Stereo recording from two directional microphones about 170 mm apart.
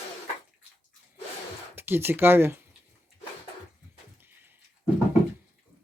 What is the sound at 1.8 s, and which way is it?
Speech, 15° right (ahead or behind).